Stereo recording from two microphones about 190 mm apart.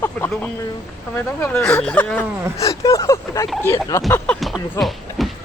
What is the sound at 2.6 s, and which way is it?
Speech, 20° left (ahead or behind).